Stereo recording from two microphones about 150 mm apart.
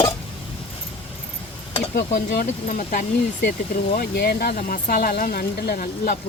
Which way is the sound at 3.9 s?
90° left.